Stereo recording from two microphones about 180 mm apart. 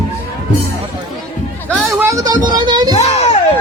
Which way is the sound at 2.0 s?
20° right (ahead or behind).